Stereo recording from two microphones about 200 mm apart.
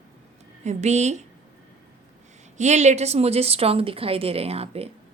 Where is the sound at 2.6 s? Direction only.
35° right (ahead or behind).